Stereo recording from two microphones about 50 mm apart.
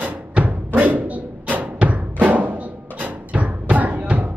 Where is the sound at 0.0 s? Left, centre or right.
Right.